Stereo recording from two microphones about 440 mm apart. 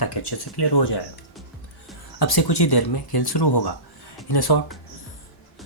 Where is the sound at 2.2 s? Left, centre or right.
Left.